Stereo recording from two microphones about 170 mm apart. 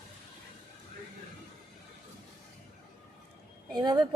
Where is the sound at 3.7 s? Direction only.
25° right (ahead or behind).